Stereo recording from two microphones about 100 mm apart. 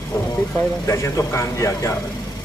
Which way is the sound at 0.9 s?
30° left (ahead or behind).